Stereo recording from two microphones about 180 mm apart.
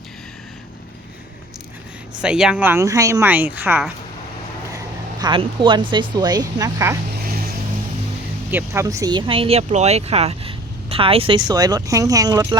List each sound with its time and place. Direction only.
2.2 s a woman's voice: 5° right (ahead or behind)
5.2 s speech: 25° right (ahead or behind)
8.4 s speech: 15° right (ahead or behind)